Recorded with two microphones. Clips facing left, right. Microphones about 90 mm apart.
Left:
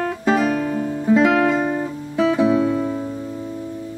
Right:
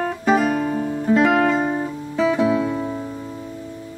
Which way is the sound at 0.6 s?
25° right (ahead or behind).